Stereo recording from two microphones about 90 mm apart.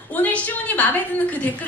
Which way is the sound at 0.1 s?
15° left (ahead or behind).